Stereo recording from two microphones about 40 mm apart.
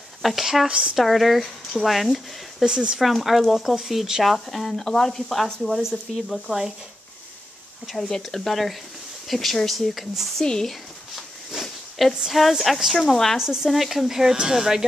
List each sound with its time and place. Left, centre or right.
0.2 s speech: centre
0.7 s speech: right
0.9 s speech: centre
2.6 s speech: right
3.0 s speech: centre
6.1 s speech: centre
6.4 s speech: centre
8.0 s speech: centre
10.4 s speech: centre
12.3 s speech: centre
13.1 s speech: centre
13.4 s speech: centre